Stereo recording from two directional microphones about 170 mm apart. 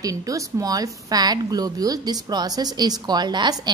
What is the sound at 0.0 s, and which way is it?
A woman's voice, 20° right (ahead or behind).